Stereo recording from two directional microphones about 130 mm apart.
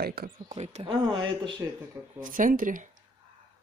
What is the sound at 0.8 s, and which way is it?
Speech, 35° right (ahead or behind).